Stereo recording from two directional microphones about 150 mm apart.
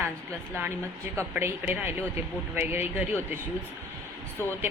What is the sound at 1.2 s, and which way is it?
Speech, 15° right (ahead or behind).